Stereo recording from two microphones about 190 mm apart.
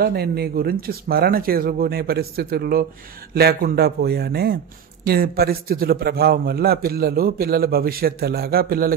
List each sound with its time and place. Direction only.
0.0 s a man's voice: 55° right (ahead or behind)